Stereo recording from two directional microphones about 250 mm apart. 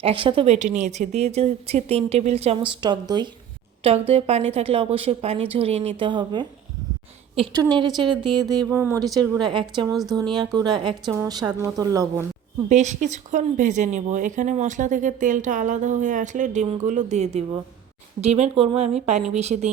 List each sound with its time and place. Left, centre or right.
0.0 s a woman's voice: right
9.9 s speech: centre
10.2 s a woman's voice: centre
12.6 s a woman's voice: right